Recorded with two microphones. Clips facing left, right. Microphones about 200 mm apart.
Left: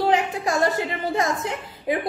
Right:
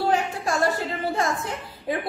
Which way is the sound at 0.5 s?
20° left (ahead or behind).